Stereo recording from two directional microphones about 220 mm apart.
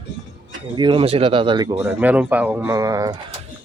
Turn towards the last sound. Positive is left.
turn(degrees=-15)  # may be behind; listen again after turning